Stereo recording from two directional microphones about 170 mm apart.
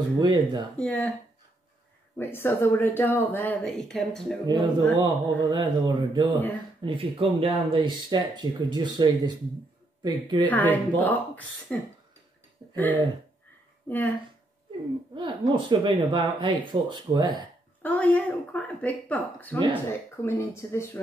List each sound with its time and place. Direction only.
0.2 s speech: 25° right (ahead or behind)
0.7 s speech: 10° left (ahead or behind)
2.1 s speech: 15° left (ahead or behind)
4.5 s speech: 25° right (ahead or behind)
10.4 s speech: 10° left (ahead or behind)
15.1 s speech: 30° right (ahead or behind)
17.8 s speech: 10° left (ahead or behind)